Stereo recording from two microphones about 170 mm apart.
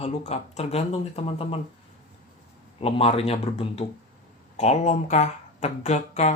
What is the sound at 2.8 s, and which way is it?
Speech, 35° left (ahead or behind).